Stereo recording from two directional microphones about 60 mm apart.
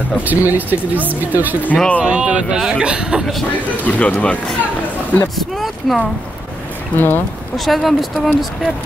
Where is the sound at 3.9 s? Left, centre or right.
Left.